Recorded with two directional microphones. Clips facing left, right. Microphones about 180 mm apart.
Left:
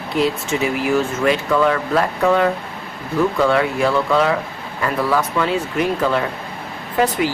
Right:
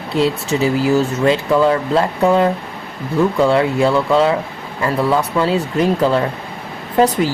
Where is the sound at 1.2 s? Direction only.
30° right (ahead or behind).